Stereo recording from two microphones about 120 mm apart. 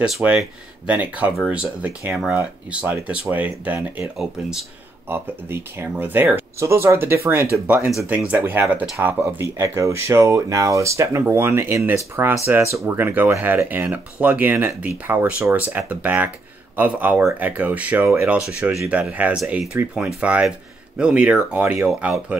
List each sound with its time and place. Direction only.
0.0 s speech: 10° right (ahead or behind)